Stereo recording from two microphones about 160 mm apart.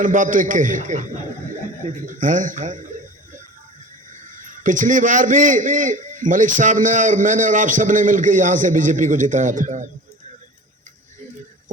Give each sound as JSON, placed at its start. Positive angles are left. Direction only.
{"t": 0.0, "sound": "a man's voice", "side_deg": -55}
{"t": 4.1, "sound": "a man's voice", "side_deg": -55}